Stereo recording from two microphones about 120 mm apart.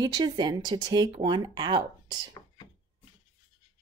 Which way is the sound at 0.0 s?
35° right (ahead or behind).